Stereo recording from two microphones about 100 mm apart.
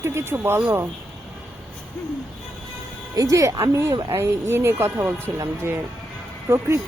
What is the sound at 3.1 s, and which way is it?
Speech, 35° right (ahead or behind).